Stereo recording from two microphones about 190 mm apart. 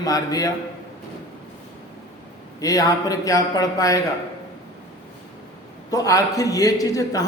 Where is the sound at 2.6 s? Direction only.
20° left (ahead or behind).